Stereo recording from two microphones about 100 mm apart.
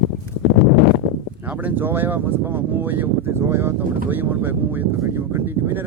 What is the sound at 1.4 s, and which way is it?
Speech, 15° right (ahead or behind).